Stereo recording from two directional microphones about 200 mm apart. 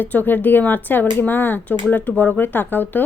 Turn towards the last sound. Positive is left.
turn(degrees=10)  # may be behind; listen again after turning